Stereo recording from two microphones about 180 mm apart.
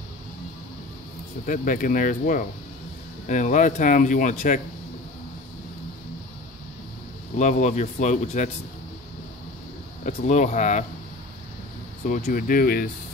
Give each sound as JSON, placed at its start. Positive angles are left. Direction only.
{"t": 1.4, "sound": "speech", "side_deg": 50}
{"t": 7.3, "sound": "speech", "side_deg": 40}
{"t": 10.0, "sound": "speech", "side_deg": 40}
{"t": 12.1, "sound": "speech", "side_deg": 50}